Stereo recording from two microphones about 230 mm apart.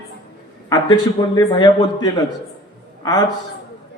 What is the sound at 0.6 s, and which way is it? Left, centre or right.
A man's voice, centre.